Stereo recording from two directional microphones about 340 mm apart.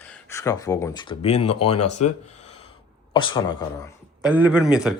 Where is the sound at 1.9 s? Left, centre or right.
Centre.